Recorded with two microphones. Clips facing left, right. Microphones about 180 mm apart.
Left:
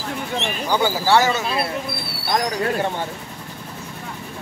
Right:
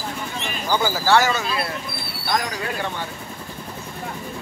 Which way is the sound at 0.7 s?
20° left (ahead or behind).